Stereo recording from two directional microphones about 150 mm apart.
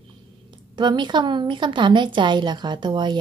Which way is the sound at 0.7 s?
30° right (ahead or behind).